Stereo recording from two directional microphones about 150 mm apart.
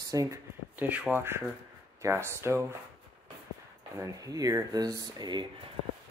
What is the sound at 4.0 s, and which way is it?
Speech, 20° right (ahead or behind).